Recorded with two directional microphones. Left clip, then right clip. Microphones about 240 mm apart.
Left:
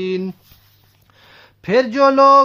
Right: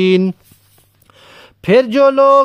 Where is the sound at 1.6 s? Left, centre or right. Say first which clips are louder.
Right 4 dB; right.